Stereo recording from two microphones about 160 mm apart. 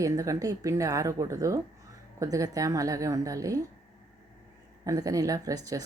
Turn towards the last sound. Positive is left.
turn(degrees=-25)  # may be behind; listen again after turning